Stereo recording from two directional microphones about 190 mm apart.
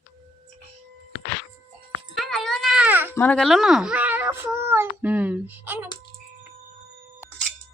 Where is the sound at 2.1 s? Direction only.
Centre (ahead or behind).